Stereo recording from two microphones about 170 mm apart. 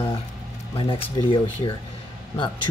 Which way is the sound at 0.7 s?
30° left (ahead or behind).